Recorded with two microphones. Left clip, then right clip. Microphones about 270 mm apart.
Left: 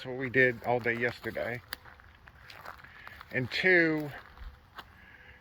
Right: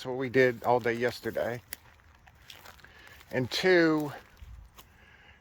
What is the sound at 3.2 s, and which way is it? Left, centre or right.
Speech, right.